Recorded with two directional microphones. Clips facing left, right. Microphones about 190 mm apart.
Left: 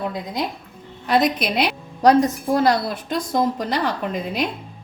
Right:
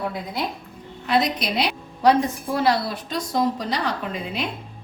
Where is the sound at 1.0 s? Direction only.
55° left (ahead or behind).